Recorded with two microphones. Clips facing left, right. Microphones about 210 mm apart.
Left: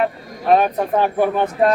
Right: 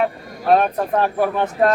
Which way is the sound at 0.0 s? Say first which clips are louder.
Even; centre (ahead or behind).